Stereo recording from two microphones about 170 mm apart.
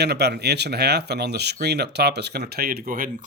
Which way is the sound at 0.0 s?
75° right (ahead or behind).